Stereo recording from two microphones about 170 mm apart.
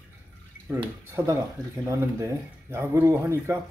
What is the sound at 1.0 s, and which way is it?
Speech, 15° right (ahead or behind).